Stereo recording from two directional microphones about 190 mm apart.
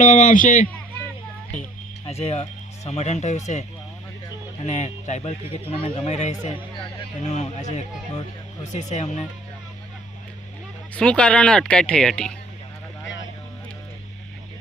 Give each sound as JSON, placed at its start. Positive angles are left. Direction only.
{"t": 0.0, "sound": "a man's voice", "side_deg": 40}
{"t": 2.0, "sound": "speech", "side_deg": 35}
{"t": 10.9, "sound": "speech", "side_deg": 5}